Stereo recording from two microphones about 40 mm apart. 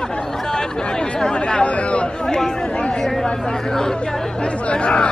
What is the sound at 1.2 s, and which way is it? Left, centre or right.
Chatter, left.